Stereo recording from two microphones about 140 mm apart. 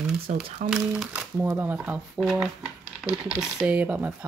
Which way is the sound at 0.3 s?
55° right (ahead or behind).